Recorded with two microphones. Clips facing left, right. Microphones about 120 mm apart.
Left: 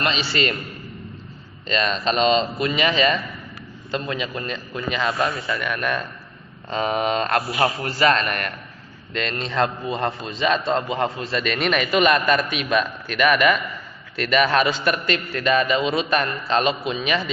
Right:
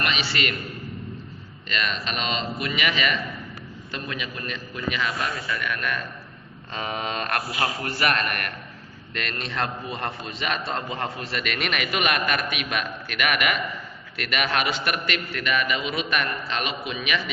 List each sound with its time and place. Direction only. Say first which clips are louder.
0.0 s a man's voice: left 4 dB; 30° left (ahead or behind)
1.6 s a man's voice: left 7 dB; 30° left (ahead or behind)